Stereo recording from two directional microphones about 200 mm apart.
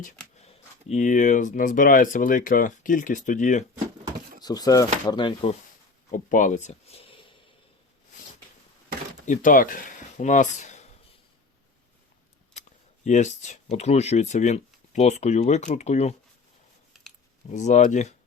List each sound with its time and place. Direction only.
0.4 s speech: 35° left (ahead or behind)
4.4 s speech: 20° left (ahead or behind)
6.1 s speech: 40° left (ahead or behind)
9.2 s speech: 40° left (ahead or behind)
13.1 s speech: 35° left (ahead or behind)
17.5 s speech: 35° left (ahead or behind)